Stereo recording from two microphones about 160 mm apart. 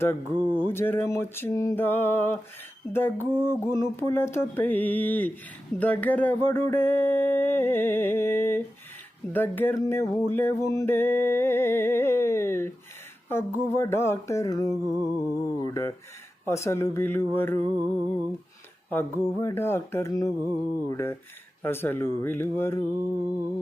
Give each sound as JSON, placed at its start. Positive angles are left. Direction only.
{"t": 0.0, "sound": "music", "side_deg": 15}
{"t": 13.2, "sound": "a sound", "side_deg": 15}
{"t": 16.5, "sound": "music", "side_deg": 15}
{"t": 18.9, "sound": "music", "side_deg": 15}